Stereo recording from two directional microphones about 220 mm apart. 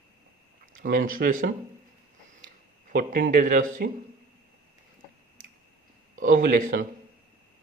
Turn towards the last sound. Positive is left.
turn(degrees=-35)  # may be behind; listen again after turning